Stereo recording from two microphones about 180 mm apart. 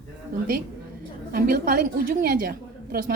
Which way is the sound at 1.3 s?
55° right (ahead or behind).